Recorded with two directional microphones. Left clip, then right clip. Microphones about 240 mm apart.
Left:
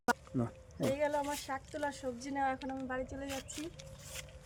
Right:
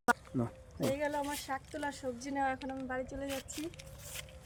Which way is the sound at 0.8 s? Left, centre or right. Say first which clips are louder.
Left 1 dB; centre.